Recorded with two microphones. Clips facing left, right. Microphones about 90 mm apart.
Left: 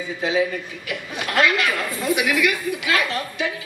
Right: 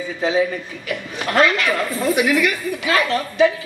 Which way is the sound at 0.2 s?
35° right (ahead or behind).